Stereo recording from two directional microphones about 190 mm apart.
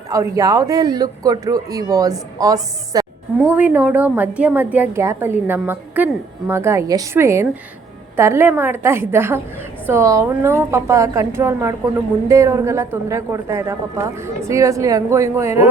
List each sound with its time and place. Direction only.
0.1 s speech: 20° right (ahead or behind)
3.3 s a woman's voice: 10° right (ahead or behind)